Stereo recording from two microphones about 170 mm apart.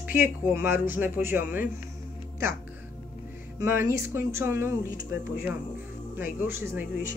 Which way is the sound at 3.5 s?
15° right (ahead or behind).